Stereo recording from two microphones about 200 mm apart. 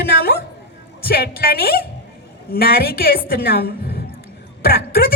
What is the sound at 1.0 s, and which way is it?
A woman's voice, 50° left (ahead or behind).